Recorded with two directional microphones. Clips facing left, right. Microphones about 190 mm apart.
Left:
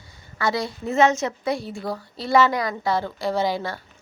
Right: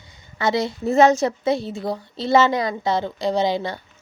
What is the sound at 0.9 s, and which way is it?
Speech, 35° right (ahead or behind).